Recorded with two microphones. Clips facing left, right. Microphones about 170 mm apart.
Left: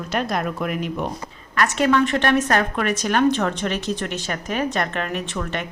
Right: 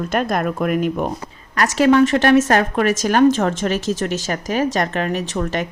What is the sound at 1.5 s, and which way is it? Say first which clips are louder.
A woman's voice: right 4 dB; 35° right (ahead or behind).